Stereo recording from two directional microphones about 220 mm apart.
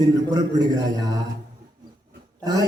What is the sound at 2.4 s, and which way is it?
Speech, 15° right (ahead or behind).